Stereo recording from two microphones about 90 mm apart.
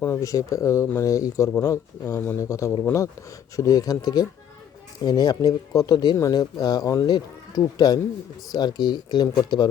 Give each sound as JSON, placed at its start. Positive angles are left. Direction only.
{"t": 0.0, "sound": "speech", "side_deg": 35}
{"t": 6.1, "sound": "speech", "side_deg": 35}
{"t": 6.4, "sound": "speech", "side_deg": 50}